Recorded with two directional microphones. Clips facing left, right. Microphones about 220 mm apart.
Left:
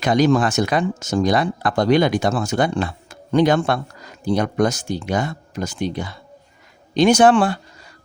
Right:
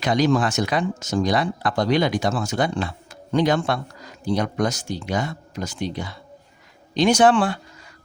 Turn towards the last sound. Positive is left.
turn(degrees=45)  # may be behind; listen again after turning